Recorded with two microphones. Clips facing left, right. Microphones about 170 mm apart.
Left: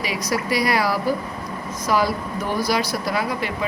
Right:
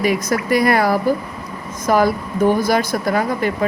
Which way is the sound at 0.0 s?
50° right (ahead or behind).